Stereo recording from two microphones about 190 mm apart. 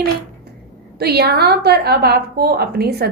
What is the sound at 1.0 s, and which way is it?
A woman's voice, 55° right (ahead or behind).